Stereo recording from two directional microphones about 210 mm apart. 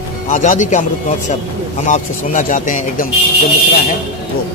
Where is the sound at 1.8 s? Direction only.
35° left (ahead or behind).